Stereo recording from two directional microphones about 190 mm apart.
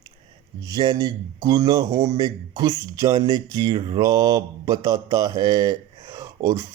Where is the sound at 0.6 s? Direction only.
20° right (ahead or behind).